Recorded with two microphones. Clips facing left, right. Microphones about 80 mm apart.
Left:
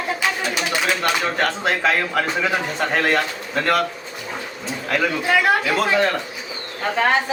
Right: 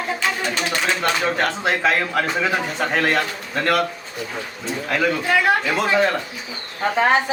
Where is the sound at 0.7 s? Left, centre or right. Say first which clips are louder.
Left 1 dB; centre.